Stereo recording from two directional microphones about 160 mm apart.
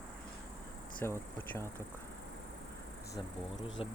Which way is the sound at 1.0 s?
15° left (ahead or behind).